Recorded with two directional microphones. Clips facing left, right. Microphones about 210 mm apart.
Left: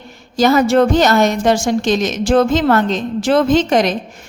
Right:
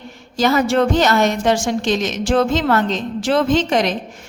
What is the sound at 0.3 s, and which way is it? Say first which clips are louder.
A woman's voice: left 4 dB; 40° left (ahead or behind).